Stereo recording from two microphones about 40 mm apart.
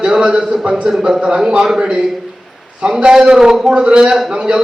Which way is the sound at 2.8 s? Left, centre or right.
Right.